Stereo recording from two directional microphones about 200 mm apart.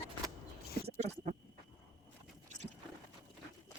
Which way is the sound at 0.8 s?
35° right (ahead or behind).